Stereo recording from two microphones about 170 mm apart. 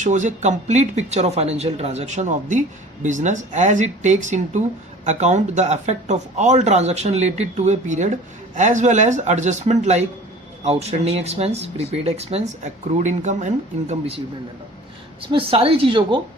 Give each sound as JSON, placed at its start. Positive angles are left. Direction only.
{"t": 0.0, "sound": "speech", "side_deg": -45}
{"t": 15.3, "sound": "speech", "side_deg": -30}